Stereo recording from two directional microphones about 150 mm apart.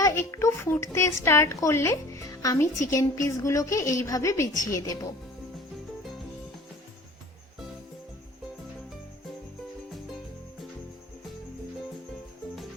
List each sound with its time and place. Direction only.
0.0 s a child's voice: 20° left (ahead or behind)